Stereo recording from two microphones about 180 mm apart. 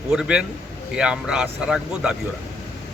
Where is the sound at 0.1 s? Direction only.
5° right (ahead or behind).